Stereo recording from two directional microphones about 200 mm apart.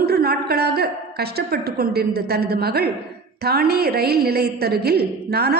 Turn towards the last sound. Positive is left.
turn(degrees=-50)  # may be behind; listen again after turning